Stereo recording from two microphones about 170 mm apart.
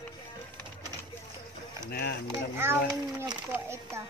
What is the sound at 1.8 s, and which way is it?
Speech, 70° left (ahead or behind).